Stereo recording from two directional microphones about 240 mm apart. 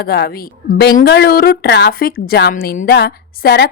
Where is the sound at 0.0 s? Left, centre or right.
Left.